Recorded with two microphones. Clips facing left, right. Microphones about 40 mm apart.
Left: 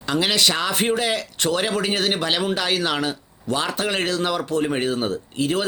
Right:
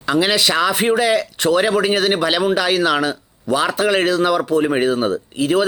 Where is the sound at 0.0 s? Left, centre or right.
Right.